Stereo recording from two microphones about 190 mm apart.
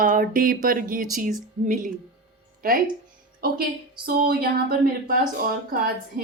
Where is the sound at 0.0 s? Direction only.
45° right (ahead or behind).